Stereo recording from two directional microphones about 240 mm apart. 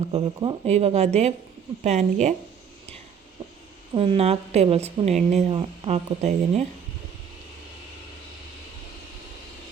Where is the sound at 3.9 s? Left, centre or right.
Right.